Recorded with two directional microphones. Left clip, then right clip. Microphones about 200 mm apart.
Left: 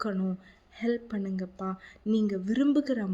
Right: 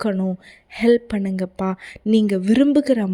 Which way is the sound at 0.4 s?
45° right (ahead or behind).